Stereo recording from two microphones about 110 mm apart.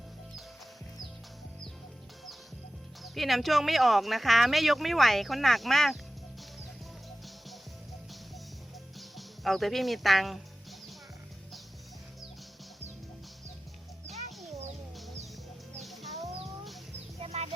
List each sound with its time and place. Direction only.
3.0 s speech: centre (ahead or behind)
9.0 s music: centre (ahead or behind)
15.8 s music: centre (ahead or behind)
17.2 s bird: 75° right (ahead or behind)